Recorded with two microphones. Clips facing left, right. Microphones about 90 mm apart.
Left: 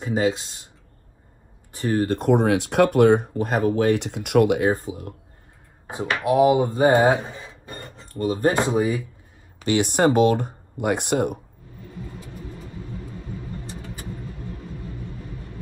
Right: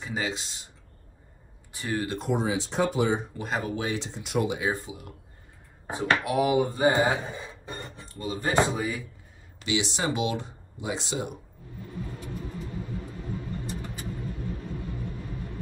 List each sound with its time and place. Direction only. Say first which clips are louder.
0.0 s speech: left 9 dB; 45° left (ahead or behind)
1.8 s speech: left 8 dB; 50° left (ahead or behind)
6.2 s speech: left 11 dB; 25° left (ahead or behind)
6.8 s speech: left 6 dB; 55° left (ahead or behind)
7.7 s speech: left 2 dB; 15° right (ahead or behind)
8.0 s speech: left 11 dB; 50° left (ahead or behind)